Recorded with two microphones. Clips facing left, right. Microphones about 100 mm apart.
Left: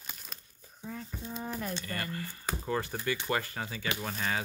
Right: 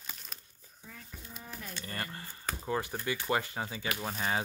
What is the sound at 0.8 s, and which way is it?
Speech, 30° left (ahead or behind).